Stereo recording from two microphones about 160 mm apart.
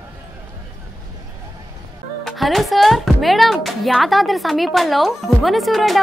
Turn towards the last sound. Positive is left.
turn(degrees=0)  # may be behind; listen again after turning